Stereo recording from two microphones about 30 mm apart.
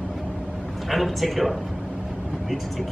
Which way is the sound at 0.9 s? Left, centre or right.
Centre.